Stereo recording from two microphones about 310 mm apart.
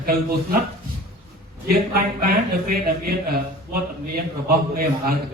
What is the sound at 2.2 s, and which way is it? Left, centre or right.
A man's voice, right.